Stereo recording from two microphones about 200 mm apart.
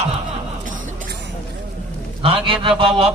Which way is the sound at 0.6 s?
55° right (ahead or behind).